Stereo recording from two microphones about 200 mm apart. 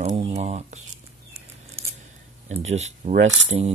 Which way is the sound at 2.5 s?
35° right (ahead or behind).